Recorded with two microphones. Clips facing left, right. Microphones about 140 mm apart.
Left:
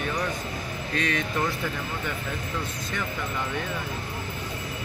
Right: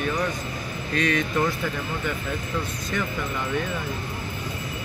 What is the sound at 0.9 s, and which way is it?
Speech, 25° left (ahead or behind).